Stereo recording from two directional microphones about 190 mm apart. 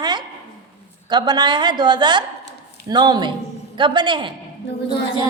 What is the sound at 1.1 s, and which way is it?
A woman's voice, 20° right (ahead or behind).